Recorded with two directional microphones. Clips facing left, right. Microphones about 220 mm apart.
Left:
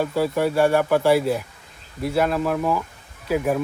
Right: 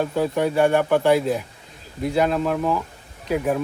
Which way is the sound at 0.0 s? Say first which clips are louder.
Even; 5° left (ahead or behind).